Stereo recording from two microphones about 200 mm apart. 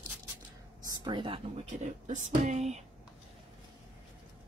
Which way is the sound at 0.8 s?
20° right (ahead or behind).